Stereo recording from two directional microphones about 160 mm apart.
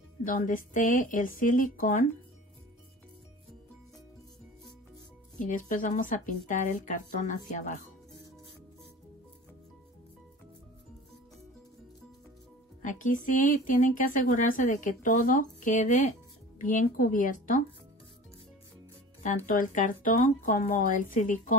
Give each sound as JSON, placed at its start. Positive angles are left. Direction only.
{"t": 0.2, "sound": "speech", "side_deg": 60}
{"t": 5.4, "sound": "speech", "side_deg": 55}
{"t": 12.8, "sound": "speech", "side_deg": 55}
{"t": 19.2, "sound": "speech", "side_deg": 55}